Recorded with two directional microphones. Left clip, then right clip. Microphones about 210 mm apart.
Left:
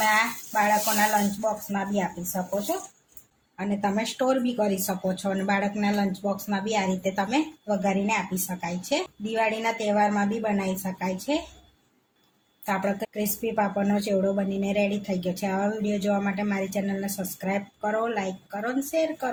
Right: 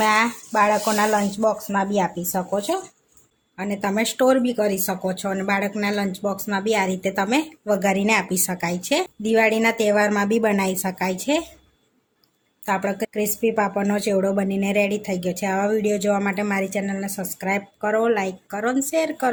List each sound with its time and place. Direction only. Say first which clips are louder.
0.0 s speech: right 4 dB; 50° right (ahead or behind)
3.6 s speech: right 4 dB; 30° right (ahead or behind)
12.6 s speech: right 4 dB; 30° right (ahead or behind)